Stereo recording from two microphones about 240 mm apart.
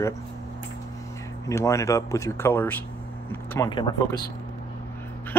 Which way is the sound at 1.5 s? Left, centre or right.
Centre.